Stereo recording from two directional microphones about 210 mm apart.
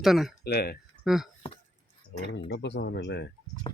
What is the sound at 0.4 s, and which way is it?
Speech, 50° left (ahead or behind).